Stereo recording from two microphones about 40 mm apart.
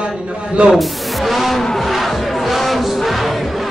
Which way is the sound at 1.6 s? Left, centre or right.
Centre.